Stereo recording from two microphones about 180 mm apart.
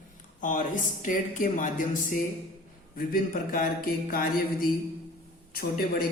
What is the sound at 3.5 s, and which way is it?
Speech, 50° left (ahead or behind).